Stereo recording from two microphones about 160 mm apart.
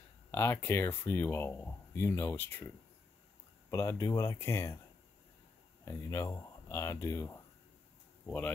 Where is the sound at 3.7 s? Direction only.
20° left (ahead or behind).